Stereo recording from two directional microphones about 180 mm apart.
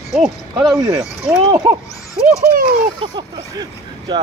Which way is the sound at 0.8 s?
15° right (ahead or behind).